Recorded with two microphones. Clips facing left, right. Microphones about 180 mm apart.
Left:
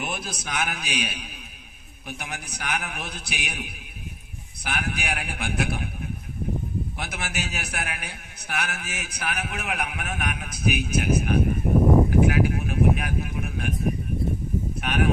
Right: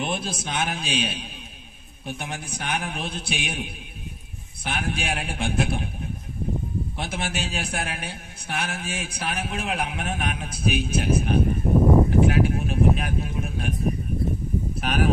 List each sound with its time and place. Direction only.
0.0 s a man's voice: 30° right (ahead or behind)
7.0 s a man's voice: 30° right (ahead or behind)
12.1 s a sound: 30° right (ahead or behind)
14.8 s speech: 35° right (ahead or behind)